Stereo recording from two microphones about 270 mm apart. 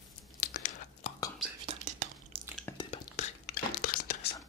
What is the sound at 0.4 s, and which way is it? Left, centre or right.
Chewing, left.